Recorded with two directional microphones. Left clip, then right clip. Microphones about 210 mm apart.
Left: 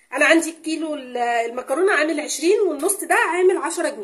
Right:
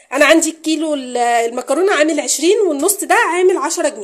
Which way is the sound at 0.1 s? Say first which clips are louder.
Right 5 dB; 40° right (ahead or behind).